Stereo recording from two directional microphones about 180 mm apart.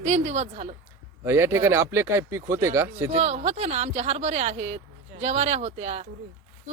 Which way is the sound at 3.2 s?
35° right (ahead or behind).